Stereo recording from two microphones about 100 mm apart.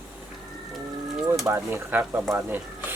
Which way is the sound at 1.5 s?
25° right (ahead or behind).